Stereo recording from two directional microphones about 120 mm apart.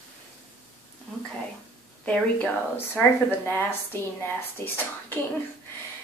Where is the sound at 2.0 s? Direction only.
10° left (ahead or behind).